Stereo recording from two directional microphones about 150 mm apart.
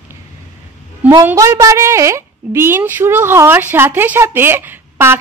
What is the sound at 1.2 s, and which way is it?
A woman's voice, 20° right (ahead or behind).